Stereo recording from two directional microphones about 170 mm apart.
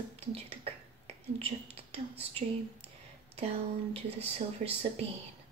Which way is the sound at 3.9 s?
35° right (ahead or behind).